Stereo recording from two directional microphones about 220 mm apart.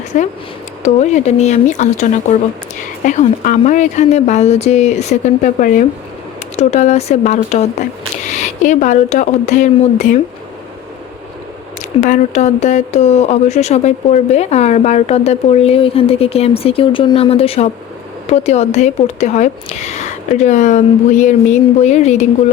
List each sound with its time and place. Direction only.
0.1 s speech: 35° left (ahead or behind)
11.9 s speech: 35° left (ahead or behind)